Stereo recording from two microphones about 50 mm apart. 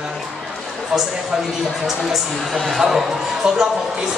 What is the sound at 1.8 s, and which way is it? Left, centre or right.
A woman's voice, centre.